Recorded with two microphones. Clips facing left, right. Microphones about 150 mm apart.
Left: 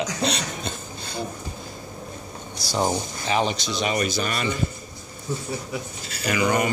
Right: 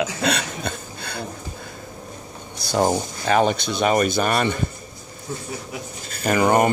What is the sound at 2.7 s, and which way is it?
Speech, 50° right (ahead or behind).